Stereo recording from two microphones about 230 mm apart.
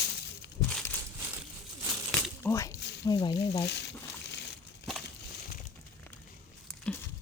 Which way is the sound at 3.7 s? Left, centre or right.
Left.